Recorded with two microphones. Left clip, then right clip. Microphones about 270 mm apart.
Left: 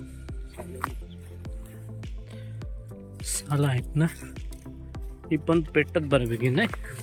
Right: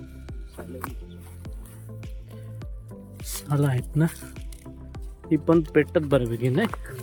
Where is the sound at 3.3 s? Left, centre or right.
Centre.